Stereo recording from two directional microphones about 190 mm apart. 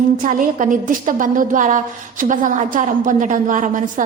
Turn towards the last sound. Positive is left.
turn(degrees=-40)  # may be behind; listen again after turning